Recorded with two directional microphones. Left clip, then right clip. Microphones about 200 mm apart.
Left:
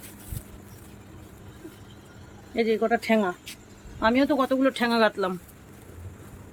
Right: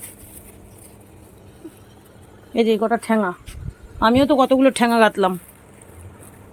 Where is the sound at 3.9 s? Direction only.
30° right (ahead or behind).